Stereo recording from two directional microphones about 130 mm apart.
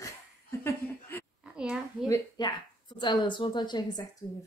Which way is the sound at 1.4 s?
5° right (ahead or behind).